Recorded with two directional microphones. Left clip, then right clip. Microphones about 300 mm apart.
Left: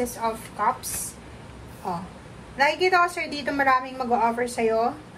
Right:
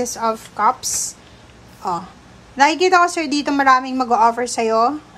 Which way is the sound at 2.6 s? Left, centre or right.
Centre.